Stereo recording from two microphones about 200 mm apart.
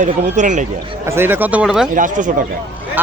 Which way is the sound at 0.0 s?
40° right (ahead or behind).